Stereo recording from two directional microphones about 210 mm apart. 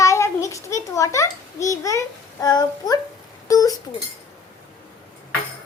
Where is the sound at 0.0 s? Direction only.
15° left (ahead or behind).